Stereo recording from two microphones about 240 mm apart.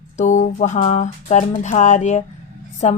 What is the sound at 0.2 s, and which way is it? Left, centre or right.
Music, left.